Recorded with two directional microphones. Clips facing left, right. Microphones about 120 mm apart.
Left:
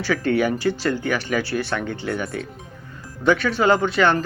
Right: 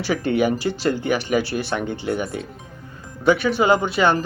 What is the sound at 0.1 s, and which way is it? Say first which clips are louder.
Speech: right 1 dB; 20° right (ahead or behind).